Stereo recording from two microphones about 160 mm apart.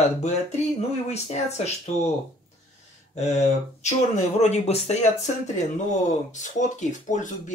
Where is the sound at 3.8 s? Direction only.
45° left (ahead or behind).